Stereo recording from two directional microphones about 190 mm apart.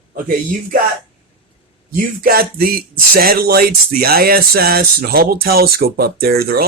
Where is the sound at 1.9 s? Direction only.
50° right (ahead or behind).